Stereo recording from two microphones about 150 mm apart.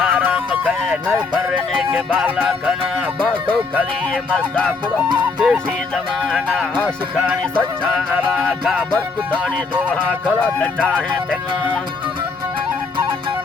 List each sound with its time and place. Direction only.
0.1 s music: 15° right (ahead or behind)
1.3 s music: 30° right (ahead or behind)
3.8 s music: 5° left (ahead or behind)
5.2 s music: 5° right (ahead or behind)
6.8 s music: 10° right (ahead or behind)
9.9 s music: 10° left (ahead or behind)